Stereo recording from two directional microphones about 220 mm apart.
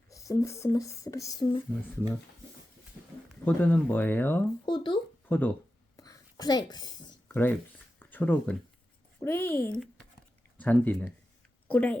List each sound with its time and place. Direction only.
0.1 s speech: 15° left (ahead or behind)
3.4 s speech: 10° left (ahead or behind)
4.6 s speech: 20° left (ahead or behind)
5.3 s speech: 10° left (ahead or behind)
6.0 s a sound: 15° left (ahead or behind)
9.2 s speech: 10° left (ahead or behind)